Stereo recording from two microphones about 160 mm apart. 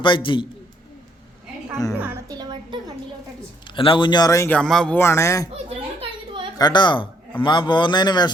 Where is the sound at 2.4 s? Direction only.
30° right (ahead or behind).